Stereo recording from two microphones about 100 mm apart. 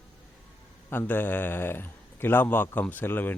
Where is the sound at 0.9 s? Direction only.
20° left (ahead or behind).